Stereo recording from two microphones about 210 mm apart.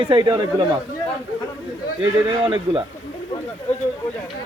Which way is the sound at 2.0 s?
25° right (ahead or behind).